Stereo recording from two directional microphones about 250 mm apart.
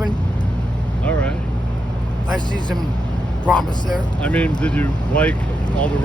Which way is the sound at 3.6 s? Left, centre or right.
Centre.